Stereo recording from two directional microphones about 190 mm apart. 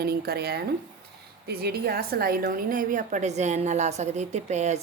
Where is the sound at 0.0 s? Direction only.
55° right (ahead or behind).